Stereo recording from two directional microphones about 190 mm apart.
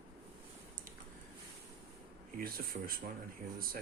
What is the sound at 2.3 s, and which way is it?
Speech, 50° right (ahead or behind).